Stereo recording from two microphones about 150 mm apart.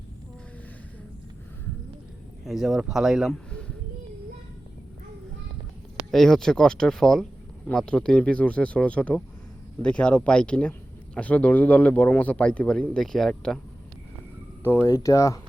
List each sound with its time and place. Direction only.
2.4 s a man's voice: centre (ahead or behind)
6.1 s speech: centre (ahead or behind)
14.6 s speech: 15° left (ahead or behind)